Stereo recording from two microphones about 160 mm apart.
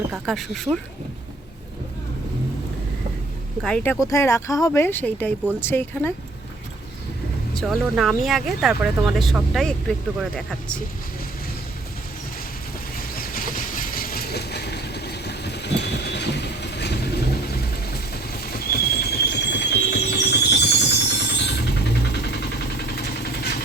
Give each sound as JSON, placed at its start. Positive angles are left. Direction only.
{"t": 0.1, "sound": "speech", "side_deg": 0}
{"t": 3.6, "sound": "speech", "side_deg": 5}
{"t": 4.0, "sound": "speech", "side_deg": 15}
{"t": 7.5, "sound": "speech", "side_deg": 0}
{"t": 13.1, "sound": "vehicle", "side_deg": 65}
{"t": 17.9, "sound": "a sound", "side_deg": 75}
{"t": 21.2, "sound": "vehicle", "side_deg": 90}